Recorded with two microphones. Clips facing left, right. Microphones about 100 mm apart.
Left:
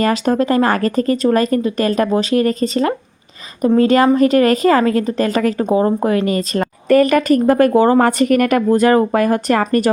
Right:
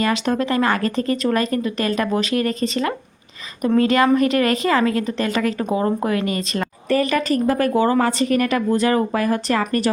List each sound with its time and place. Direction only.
0.0 s speech: 40° left (ahead or behind)
6.8 s a woman's voice: 50° left (ahead or behind)